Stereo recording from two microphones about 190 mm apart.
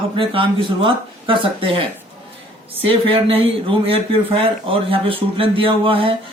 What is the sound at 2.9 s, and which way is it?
Speech, 30° right (ahead or behind).